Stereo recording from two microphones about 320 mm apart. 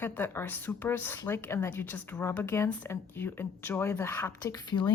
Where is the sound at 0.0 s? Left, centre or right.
Centre.